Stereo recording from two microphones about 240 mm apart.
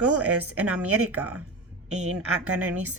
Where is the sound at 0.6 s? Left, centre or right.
Centre.